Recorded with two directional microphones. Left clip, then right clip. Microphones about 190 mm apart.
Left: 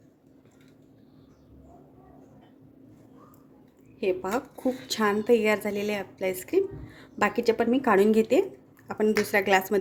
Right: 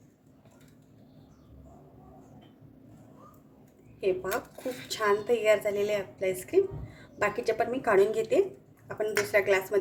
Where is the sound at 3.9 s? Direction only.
50° left (ahead or behind).